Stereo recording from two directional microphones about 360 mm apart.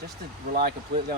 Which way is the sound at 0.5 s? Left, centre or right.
Right.